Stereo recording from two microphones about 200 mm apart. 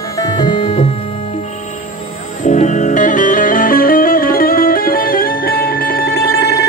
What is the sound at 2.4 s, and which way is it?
Music, 35° left (ahead or behind).